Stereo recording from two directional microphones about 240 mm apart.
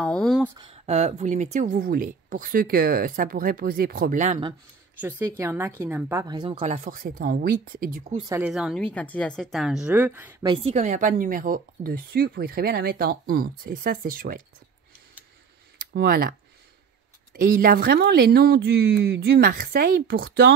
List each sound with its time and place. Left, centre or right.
0.0 s a sound: centre
0.6 s speech: right
5.4 s a woman's voice: centre; by 8.1 s right
8.3 s a woman's voice: centre
10.5 s speech: right
15.9 s speech: right